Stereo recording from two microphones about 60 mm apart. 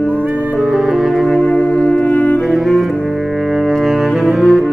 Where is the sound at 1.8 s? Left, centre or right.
Left.